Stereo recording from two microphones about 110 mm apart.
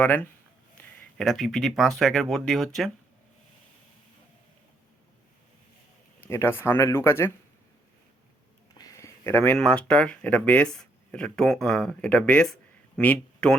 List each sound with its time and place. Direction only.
0.0 s speech: 15° left (ahead or behind)
1.2 s speech: centre (ahead or behind)
6.2 s speech: 20° left (ahead or behind)
8.7 s a sound: 35° left (ahead or behind)
9.6 s speech: 10° left (ahead or behind)